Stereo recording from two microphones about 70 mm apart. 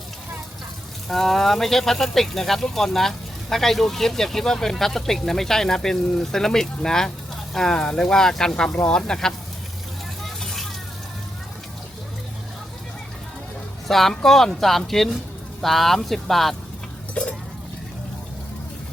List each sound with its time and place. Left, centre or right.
1.0 s speech: centre
10.2 s a sound: centre
13.8 s speech: centre
17.2 s stir: centre